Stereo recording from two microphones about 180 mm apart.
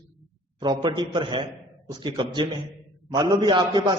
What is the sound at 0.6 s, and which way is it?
Speech, 25° right (ahead or behind).